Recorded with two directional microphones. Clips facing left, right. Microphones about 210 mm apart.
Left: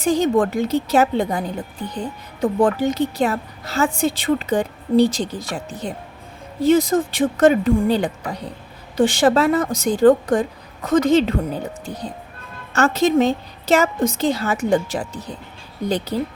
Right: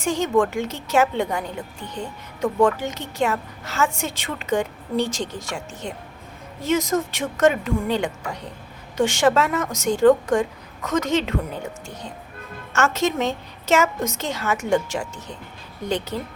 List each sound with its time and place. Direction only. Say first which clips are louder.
0.0 s a woman's voice: left 3 dB; 35° left (ahead or behind)